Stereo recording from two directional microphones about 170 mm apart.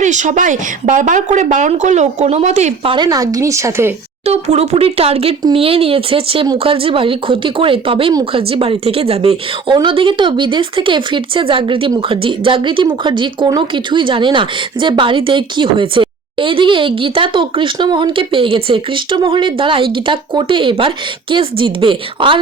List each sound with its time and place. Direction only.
0.0 s speech: 45° right (ahead or behind)
2.9 s speech: 25° right (ahead or behind)
4.3 s speech: 40° right (ahead or behind)